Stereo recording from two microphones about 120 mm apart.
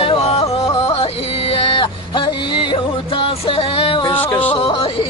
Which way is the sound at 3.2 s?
50° left (ahead or behind).